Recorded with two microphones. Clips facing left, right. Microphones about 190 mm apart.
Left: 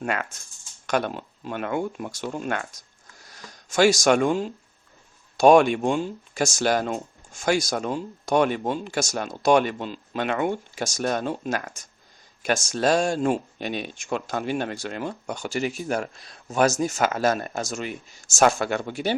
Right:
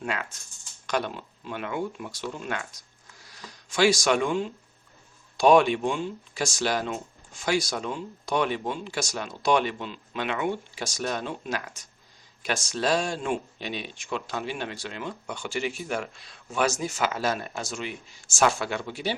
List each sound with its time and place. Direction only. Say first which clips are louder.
0.0 s speech: left 4 dB; 50° left (ahead or behind)